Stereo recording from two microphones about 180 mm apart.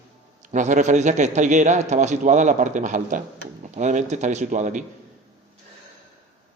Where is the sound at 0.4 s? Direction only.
45° right (ahead or behind).